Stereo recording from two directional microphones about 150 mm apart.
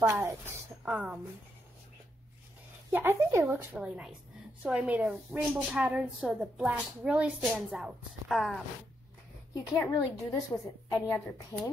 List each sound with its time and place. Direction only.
0.0 s a woman's voice: 20° right (ahead or behind)
2.9 s a woman's voice: 15° right (ahead or behind)
9.8 s a woman's voice: 15° left (ahead or behind)